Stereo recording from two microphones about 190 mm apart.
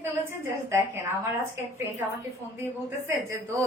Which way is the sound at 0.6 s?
15° right (ahead or behind).